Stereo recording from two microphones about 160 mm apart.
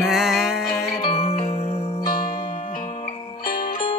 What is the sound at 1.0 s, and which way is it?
Music, 35° left (ahead or behind).